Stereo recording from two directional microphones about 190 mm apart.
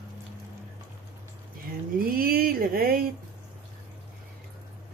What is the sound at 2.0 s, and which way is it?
Speech, 50° right (ahead or behind).